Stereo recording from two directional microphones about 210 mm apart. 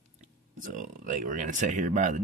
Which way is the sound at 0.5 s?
40° right (ahead or behind).